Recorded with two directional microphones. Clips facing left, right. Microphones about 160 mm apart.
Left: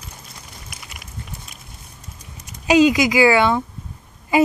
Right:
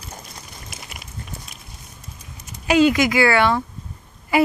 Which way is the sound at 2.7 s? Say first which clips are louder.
Left 2 dB; 15° left (ahead or behind).